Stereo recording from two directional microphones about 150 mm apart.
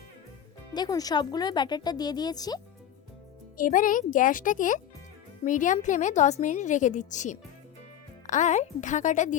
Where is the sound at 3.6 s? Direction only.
60° left (ahead or behind).